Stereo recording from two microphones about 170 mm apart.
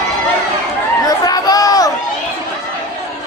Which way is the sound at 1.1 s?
20° left (ahead or behind).